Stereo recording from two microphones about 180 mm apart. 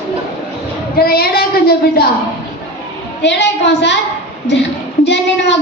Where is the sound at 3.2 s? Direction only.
75° left (ahead or behind).